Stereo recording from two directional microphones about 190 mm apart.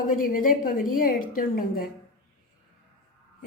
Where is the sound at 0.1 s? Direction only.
45° left (ahead or behind).